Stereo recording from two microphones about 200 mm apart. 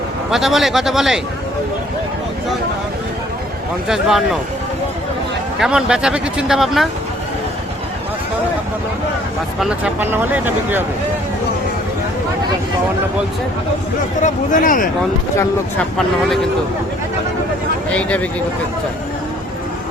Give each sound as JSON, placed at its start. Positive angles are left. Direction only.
{"t": 0.3, "sound": "speech", "side_deg": 0}
{"t": 3.8, "sound": "speech", "side_deg": 0}
{"t": 5.5, "sound": "speech", "side_deg": -5}
{"t": 9.6, "sound": "speech", "side_deg": -5}
{"t": 14.2, "sound": "speech", "side_deg": 40}
{"t": 17.9, "sound": "speech", "side_deg": 5}